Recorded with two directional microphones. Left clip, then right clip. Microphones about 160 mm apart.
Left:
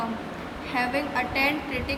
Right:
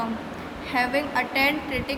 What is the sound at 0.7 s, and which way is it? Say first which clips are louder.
A woman's voice: right 3 dB; 40° right (ahead or behind).